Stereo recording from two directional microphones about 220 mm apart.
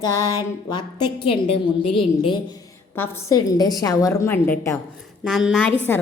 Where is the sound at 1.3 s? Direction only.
25° left (ahead or behind).